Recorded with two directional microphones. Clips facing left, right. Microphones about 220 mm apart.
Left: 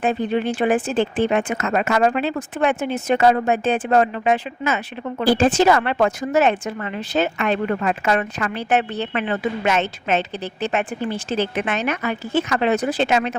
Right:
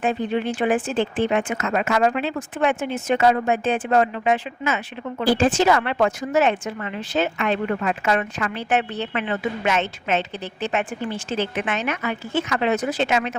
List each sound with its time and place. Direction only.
0.0 s speech: 40° left (ahead or behind)